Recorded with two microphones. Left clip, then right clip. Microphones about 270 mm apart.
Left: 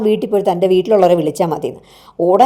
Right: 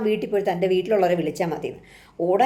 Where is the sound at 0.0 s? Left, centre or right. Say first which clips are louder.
Left 8 dB; left.